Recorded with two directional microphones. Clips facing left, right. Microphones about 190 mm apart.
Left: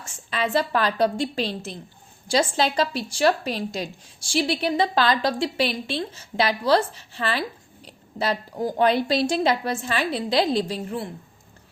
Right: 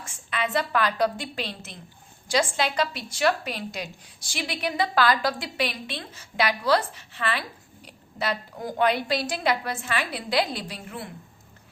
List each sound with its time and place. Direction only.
0.3 s a woman's voice: 30° left (ahead or behind)